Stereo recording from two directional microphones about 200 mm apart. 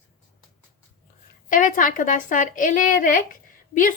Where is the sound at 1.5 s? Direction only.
40° left (ahead or behind).